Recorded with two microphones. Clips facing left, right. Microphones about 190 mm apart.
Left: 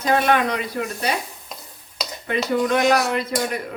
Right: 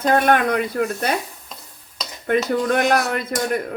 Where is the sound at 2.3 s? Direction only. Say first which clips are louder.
Right 2 dB; 50° right (ahead or behind).